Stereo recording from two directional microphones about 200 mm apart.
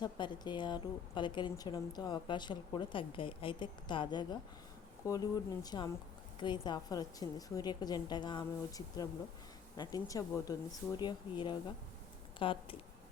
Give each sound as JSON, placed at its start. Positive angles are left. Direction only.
{"t": 0.0, "sound": "a woman's voice", "side_deg": 20}